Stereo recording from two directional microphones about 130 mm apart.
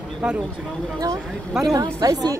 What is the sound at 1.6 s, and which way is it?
Speech, 25° right (ahead or behind).